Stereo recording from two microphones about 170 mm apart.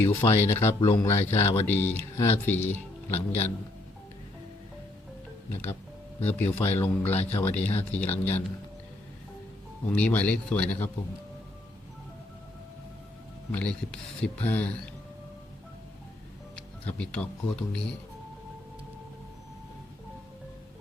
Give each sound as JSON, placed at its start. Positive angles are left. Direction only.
{"t": 0.0, "sound": "speech", "side_deg": 15}
{"t": 6.2, "sound": "speech", "side_deg": 10}
{"t": 9.9, "sound": "speech", "side_deg": 10}
{"t": 13.5, "sound": "speech", "side_deg": 5}
{"t": 16.6, "sound": "speech", "side_deg": 5}